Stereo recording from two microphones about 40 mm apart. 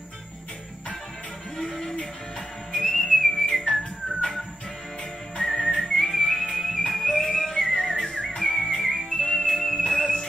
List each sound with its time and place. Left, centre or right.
1.6 s music: centre
2.7 s whistling: centre
5.6 s music: centre
5.9 s whistling: centre
6.4 s music: centre